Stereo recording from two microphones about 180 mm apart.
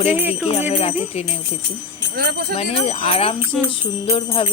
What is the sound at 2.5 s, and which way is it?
A woman's voice, 35° left (ahead or behind).